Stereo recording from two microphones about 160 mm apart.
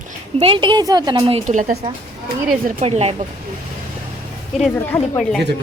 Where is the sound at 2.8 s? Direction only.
40° right (ahead or behind).